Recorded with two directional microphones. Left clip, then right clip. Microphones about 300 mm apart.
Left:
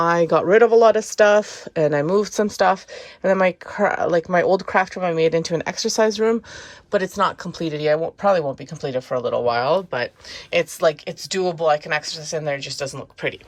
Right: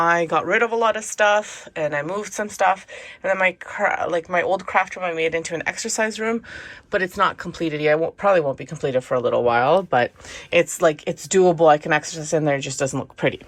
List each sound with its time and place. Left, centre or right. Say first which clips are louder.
0.0 s speech: left 1 dB; centre